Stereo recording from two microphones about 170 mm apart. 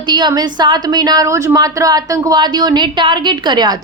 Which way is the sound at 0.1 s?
25° right (ahead or behind).